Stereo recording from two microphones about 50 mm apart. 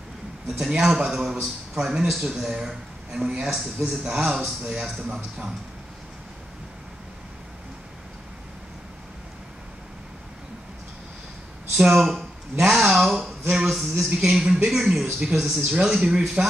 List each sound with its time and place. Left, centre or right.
0.5 s a man's voice: centre
11.7 s a sound: centre
12.7 s a man's voice: centre
15.8 s speech: centre